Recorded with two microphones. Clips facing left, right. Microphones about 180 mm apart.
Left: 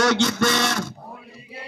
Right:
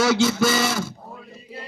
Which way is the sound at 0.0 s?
5° right (ahead or behind).